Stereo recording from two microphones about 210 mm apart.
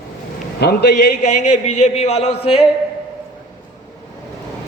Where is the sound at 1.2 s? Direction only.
35° left (ahead or behind).